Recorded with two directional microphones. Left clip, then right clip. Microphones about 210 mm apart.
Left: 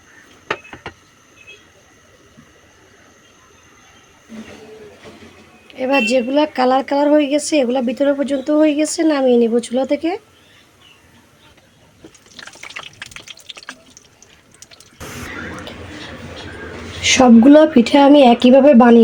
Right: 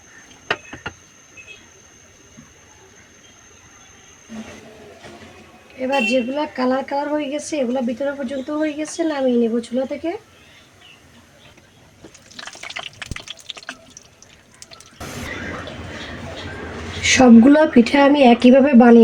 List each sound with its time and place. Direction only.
5.8 s a woman's voice: 45° left (ahead or behind)
13.0 s liquid: 5° right (ahead or behind)
17.0 s speech: 20° left (ahead or behind)